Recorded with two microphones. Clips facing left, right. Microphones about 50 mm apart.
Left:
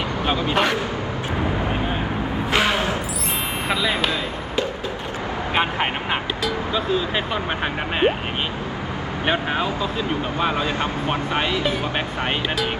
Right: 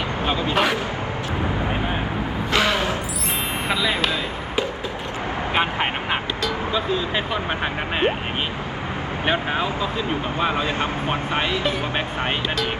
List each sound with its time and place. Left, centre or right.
0.5 s speech: centre
2.5 s a sound: centre
3.7 s speech: centre
5.5 s speech: centre
9.2 s speech: centre
10.5 s speech: right